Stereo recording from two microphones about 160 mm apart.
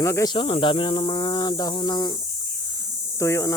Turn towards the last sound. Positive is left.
turn(degrees=15)  # may be behind; listen again after turning